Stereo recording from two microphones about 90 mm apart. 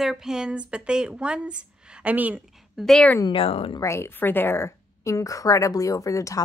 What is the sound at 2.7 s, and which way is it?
Speech, 5° left (ahead or behind).